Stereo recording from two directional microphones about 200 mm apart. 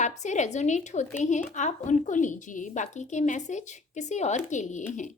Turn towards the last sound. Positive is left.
turn(degrees=35)  # may be behind; listen again after turning